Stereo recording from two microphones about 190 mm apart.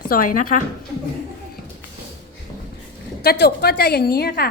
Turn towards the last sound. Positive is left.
turn(degrees=55)  # may be behind; listen again after turning